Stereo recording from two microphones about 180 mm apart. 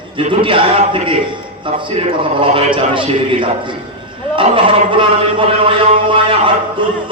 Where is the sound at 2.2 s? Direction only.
30° right (ahead or behind).